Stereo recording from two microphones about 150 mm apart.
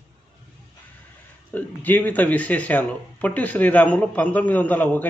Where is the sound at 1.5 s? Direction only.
10° left (ahead or behind).